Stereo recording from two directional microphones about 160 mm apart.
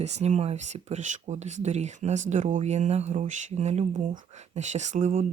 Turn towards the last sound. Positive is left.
turn(degrees=-50)  # may be behind; listen again after turning